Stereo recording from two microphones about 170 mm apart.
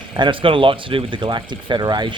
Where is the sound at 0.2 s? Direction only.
30° right (ahead or behind).